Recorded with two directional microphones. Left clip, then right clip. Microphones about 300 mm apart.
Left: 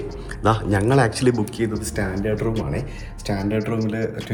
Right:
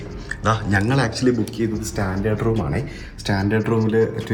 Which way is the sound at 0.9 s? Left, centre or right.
Centre.